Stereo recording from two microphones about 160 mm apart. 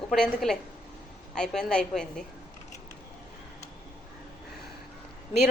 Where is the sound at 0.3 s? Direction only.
Centre (ahead or behind).